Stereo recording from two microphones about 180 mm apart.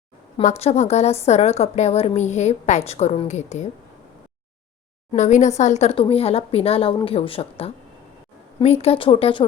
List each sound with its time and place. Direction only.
0.3 s a woman's voice: 35° left (ahead or behind)
5.1 s a woman's voice: 40° left (ahead or behind)